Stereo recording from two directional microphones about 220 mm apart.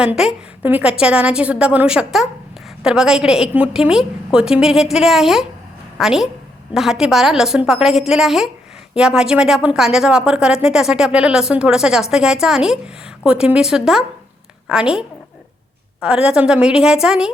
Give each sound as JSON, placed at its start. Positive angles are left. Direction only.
{"t": 0.0, "sound": "speech", "side_deg": -5}